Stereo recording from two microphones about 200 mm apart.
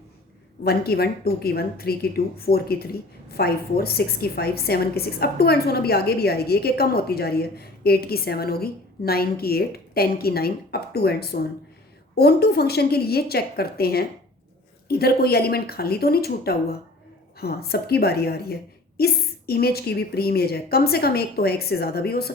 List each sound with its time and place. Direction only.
0.6 s a woman's voice: 50° left (ahead or behind)